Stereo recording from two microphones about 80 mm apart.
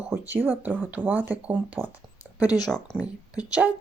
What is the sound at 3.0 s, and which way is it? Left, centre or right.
Speech, centre.